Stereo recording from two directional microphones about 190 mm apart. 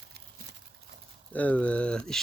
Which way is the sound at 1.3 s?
10° left (ahead or behind).